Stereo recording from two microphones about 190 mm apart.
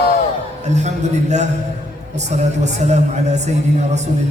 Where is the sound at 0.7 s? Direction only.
35° right (ahead or behind).